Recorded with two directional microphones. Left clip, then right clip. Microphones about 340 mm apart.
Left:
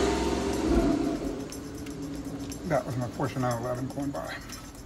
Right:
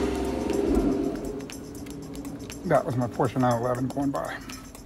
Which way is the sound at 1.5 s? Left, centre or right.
Centre.